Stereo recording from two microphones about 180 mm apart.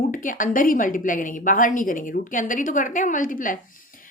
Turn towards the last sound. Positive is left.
turn(degrees=50)  # may be behind; listen again after turning